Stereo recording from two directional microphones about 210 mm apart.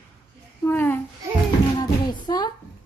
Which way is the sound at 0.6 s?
10° left (ahead or behind).